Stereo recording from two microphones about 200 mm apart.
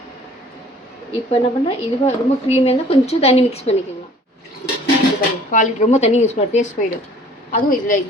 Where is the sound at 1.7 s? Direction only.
30° left (ahead or behind).